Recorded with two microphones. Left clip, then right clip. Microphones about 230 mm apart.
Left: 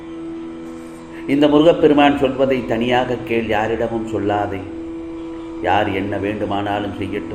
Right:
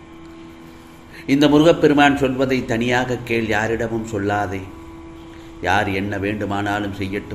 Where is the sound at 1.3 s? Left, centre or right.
Right.